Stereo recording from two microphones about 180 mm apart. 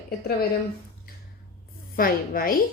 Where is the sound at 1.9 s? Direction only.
55° left (ahead or behind).